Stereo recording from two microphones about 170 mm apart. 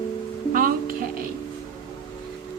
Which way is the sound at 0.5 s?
55° right (ahead or behind).